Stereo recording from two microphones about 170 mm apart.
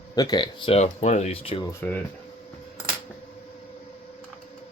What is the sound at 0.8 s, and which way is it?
Speech, 45° left (ahead or behind).